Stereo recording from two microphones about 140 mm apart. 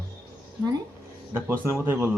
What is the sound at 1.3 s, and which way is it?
Speech, 15° right (ahead or behind).